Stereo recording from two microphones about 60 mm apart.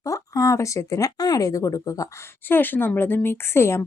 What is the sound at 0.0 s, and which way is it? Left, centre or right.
Speech, left.